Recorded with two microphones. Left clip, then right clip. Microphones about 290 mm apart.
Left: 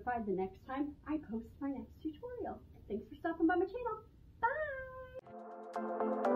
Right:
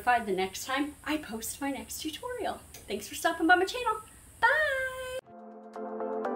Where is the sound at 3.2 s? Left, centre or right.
Centre.